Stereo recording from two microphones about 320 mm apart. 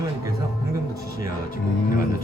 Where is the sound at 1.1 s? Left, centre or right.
Left.